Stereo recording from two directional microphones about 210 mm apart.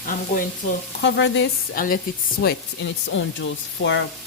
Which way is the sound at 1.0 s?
60° left (ahead or behind).